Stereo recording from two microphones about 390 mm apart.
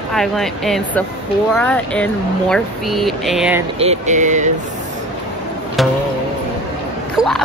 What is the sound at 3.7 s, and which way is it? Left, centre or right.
Speech, centre.